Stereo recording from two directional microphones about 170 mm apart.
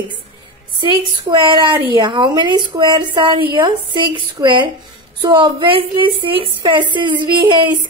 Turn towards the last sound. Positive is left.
turn(degrees=-30)  # may be behind; listen again after turning